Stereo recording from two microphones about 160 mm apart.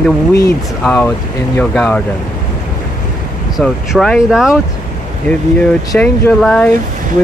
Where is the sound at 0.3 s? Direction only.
20° left (ahead or behind).